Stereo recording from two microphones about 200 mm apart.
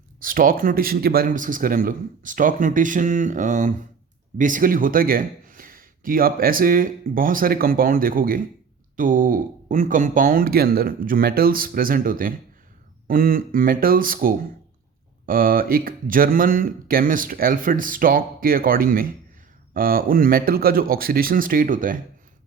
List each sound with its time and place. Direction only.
0.2 s a man's voice: 45° right (ahead or behind)